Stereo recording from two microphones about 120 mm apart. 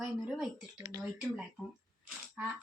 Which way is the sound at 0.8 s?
30° right (ahead or behind).